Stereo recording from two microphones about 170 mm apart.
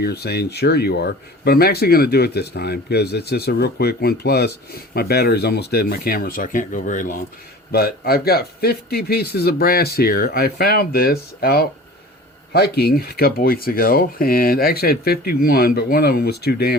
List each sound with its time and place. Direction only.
0.0 s speech: 70° left (ahead or behind); by 7.2 s 50° left (ahead or behind)
7.7 s speech: 65° left (ahead or behind)